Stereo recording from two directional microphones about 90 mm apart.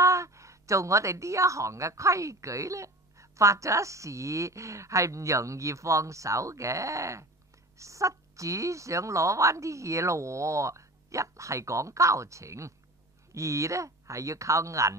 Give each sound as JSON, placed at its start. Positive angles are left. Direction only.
{"t": 0.0, "sound": "a woman's voice", "side_deg": -35}